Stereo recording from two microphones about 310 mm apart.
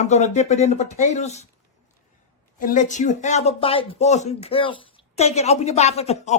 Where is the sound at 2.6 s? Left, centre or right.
Left.